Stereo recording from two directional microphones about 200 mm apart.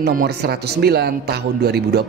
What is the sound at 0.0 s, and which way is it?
A woman's voice, 50° right (ahead or behind).